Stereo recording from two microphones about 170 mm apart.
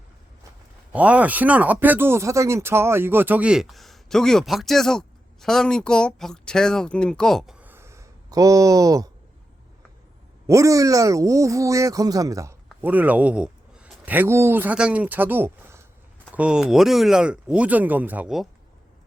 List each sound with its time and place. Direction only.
0.9 s speech: 10° right (ahead or behind)
7.6 s a sound: 15° right (ahead or behind)
10.4 s speech: 20° right (ahead or behind)